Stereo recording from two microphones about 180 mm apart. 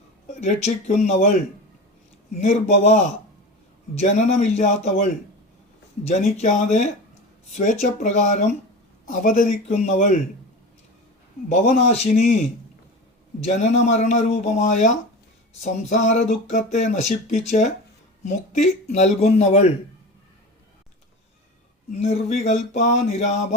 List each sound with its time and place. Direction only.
0.3 s speech: 40° left (ahead or behind)
2.4 s speech: 40° left (ahead or behind)
11.4 s speech: 40° left (ahead or behind)
13.4 s speech: 40° left (ahead or behind)
22.0 s speech: 40° left (ahead or behind)